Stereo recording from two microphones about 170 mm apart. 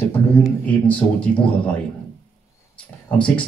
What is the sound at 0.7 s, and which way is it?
A man's voice, 10° left (ahead or behind).